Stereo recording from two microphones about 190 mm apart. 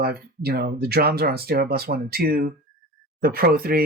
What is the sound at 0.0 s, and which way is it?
Speech, 55° right (ahead or behind).